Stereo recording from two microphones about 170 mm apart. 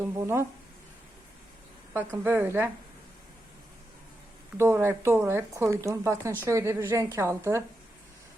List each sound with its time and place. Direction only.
0.0 s speech: 15° right (ahead or behind)
2.2 s speech: 10° right (ahead or behind)
4.5 s speech: 15° right (ahead or behind)